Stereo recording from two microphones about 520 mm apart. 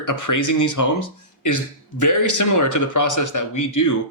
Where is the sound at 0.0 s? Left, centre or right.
Left.